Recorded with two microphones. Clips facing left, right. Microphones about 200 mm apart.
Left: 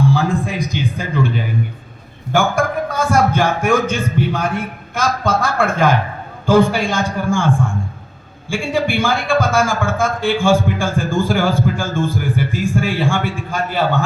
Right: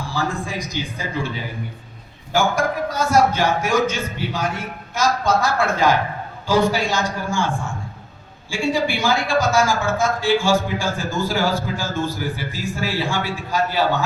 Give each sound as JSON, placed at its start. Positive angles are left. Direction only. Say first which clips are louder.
{"t": 0.1, "sound": "a man's voice", "louder": "left 7 dB", "side_deg": 60}
{"t": 2.3, "sound": "a man's voice", "louder": "left 3 dB", "side_deg": 55}